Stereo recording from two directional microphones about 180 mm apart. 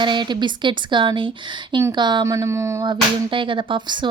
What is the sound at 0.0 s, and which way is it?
Speech, 25° right (ahead or behind).